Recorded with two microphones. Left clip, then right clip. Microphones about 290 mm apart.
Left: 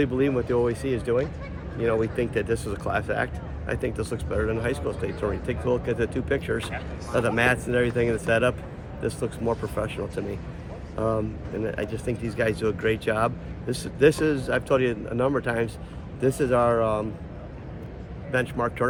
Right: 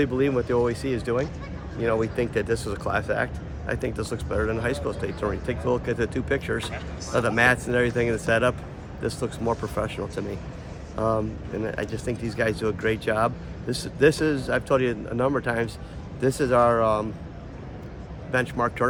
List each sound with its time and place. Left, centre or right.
0.0 s speech: centre
18.3 s speech: centre